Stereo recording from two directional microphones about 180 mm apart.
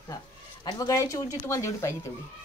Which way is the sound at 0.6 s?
20° left (ahead or behind).